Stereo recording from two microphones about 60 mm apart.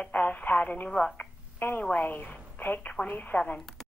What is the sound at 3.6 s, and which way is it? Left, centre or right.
Speech, centre.